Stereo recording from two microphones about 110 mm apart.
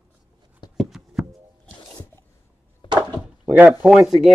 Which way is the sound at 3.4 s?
15° right (ahead or behind).